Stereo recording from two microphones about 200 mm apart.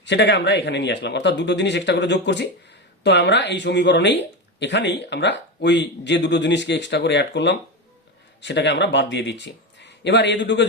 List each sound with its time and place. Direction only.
0.0 s speech: 60° left (ahead or behind)